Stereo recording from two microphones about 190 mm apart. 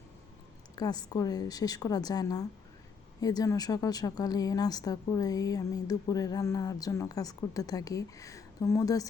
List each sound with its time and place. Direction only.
0.8 s speech: 20° left (ahead or behind)